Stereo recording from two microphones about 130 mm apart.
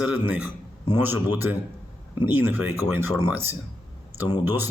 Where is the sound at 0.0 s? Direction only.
10° right (ahead or behind).